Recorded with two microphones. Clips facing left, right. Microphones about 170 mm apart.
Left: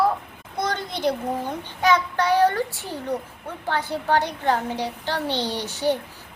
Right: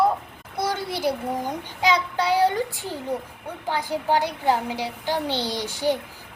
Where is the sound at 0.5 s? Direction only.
10° right (ahead or behind).